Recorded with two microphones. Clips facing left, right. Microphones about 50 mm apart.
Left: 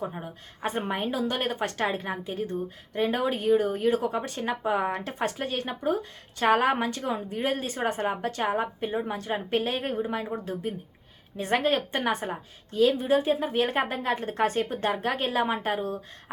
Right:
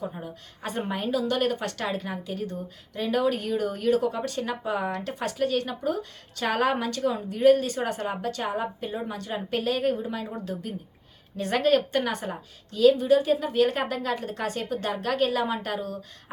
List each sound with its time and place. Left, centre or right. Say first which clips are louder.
0.6 s a woman's voice: left 1 dB; left